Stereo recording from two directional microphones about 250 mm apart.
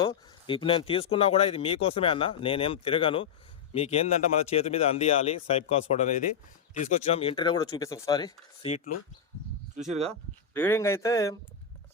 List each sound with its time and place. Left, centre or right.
0.0 s speech: centre
9.7 s speech: right
10.5 s speech: centre